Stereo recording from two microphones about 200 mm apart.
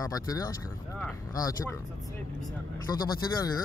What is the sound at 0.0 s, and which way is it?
Speech, 15° left (ahead or behind).